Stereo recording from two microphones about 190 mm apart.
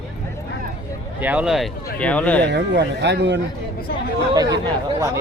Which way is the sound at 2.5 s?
65° right (ahead or behind).